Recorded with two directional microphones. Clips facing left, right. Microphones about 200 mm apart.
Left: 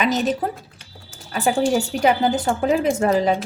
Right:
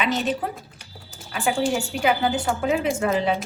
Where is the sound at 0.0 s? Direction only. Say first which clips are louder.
Left 4 dB; 40° left (ahead or behind).